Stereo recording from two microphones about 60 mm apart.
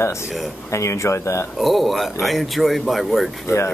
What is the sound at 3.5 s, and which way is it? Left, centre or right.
Speech, left.